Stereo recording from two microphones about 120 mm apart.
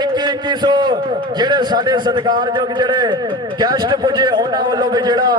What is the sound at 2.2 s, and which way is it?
A man's voice, 40° right (ahead or behind).